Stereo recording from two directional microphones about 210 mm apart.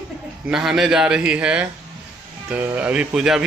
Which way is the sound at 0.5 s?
Centre (ahead or behind).